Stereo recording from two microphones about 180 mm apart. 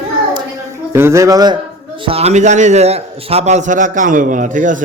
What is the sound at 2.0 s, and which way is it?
A man's voice, 35° right (ahead or behind).